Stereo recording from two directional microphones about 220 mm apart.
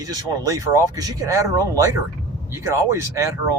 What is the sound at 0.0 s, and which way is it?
Speech, 15° right (ahead or behind).